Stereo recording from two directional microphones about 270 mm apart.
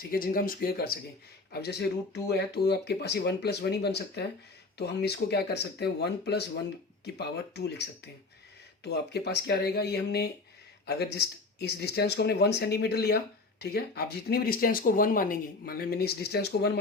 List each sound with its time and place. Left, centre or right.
0.0 s speech: left
2.1 s speech: left